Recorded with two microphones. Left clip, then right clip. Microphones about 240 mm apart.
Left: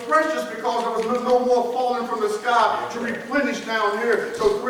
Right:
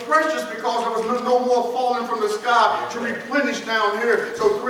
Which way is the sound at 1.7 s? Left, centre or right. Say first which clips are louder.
Right 1 dB; centre.